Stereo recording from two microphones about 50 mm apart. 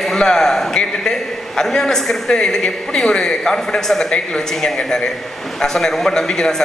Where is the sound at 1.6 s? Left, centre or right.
Centre.